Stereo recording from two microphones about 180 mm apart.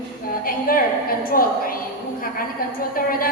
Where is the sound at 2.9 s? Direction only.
55° left (ahead or behind).